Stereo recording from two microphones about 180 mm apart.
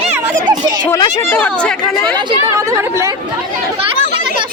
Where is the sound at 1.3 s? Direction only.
5° left (ahead or behind).